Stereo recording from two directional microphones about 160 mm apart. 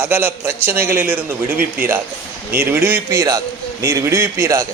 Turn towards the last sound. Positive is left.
turn(degrees=-20)  # may be behind; listen again after turning